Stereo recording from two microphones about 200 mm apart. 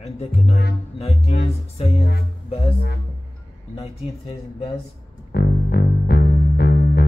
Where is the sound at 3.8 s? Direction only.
30° left (ahead or behind).